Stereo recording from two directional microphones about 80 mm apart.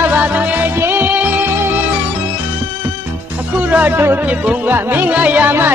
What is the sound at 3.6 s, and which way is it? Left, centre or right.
Speech, right.